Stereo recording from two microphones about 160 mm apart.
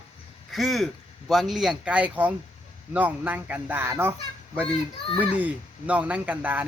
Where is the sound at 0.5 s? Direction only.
Centre (ahead or behind).